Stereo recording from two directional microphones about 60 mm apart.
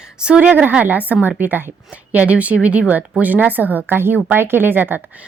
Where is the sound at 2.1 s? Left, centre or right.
Right.